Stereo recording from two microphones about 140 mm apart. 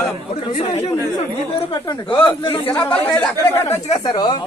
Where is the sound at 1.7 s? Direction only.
30° left (ahead or behind).